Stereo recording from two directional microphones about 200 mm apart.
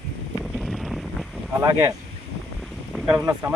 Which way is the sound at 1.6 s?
15° right (ahead or behind).